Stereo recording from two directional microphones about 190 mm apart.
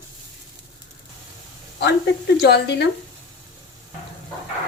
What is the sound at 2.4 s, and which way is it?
Speech, 60° left (ahead or behind).